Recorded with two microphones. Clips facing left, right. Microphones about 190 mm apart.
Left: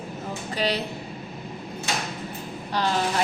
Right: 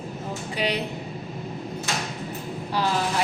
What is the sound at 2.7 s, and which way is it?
Speech, 5° right (ahead or behind).